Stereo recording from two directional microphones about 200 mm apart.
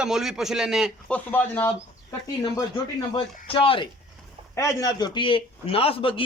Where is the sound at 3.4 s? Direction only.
25° left (ahead or behind).